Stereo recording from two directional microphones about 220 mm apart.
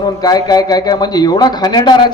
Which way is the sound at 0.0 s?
15° left (ahead or behind).